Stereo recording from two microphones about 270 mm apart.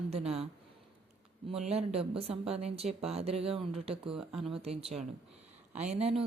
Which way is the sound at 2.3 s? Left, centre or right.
Right.